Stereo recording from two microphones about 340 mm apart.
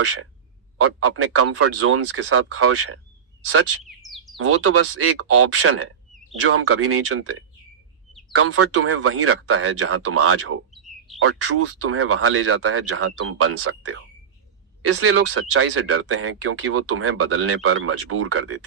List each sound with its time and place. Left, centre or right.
0.0 s speech: right
3.8 s bird: centre
4.4 s speech: right